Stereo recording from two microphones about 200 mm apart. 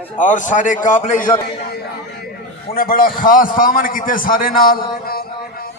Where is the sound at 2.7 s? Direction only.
45° left (ahead or behind).